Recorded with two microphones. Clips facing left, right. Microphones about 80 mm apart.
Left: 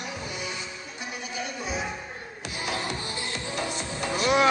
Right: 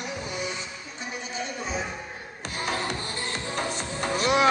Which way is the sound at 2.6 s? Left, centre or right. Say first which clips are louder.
Right 2 dB; right.